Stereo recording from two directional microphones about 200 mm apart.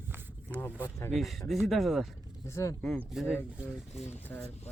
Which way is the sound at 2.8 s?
Centre (ahead or behind).